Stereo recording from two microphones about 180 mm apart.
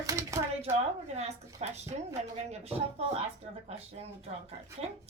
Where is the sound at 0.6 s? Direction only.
35° right (ahead or behind).